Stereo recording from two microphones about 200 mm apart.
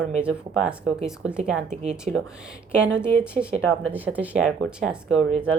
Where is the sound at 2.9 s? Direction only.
5° right (ahead or behind).